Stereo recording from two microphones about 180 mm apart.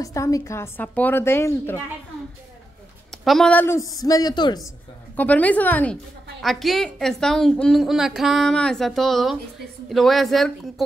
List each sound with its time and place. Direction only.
0.0 s a woman's voice: 20° left (ahead or behind)
3.3 s a woman's voice: 5° left (ahead or behind); by 4.6 s 25° left (ahead or behind)
5.1 s a woman's voice: 10° left (ahead or behind)